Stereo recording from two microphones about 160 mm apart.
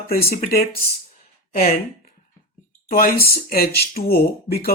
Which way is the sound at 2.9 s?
70° left (ahead or behind).